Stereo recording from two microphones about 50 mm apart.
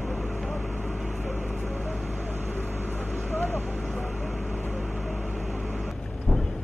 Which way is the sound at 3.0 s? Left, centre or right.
Left.